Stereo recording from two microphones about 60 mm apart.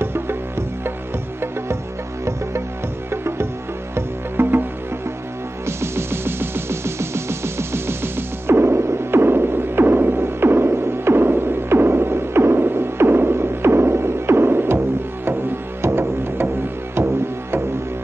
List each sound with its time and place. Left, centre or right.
0.0 s music: right
3.1 s music: right
3.9 s music: right
5.7 s music: right